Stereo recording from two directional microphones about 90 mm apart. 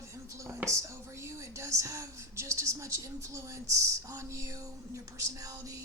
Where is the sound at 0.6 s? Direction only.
35° right (ahead or behind).